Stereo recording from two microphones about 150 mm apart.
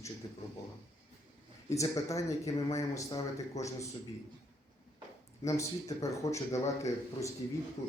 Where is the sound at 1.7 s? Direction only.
20° left (ahead or behind).